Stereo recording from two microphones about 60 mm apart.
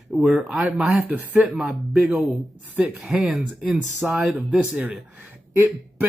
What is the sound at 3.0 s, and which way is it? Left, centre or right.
Speech, centre.